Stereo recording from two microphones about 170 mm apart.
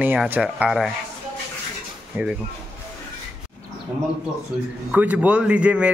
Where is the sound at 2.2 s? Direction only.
10° right (ahead or behind).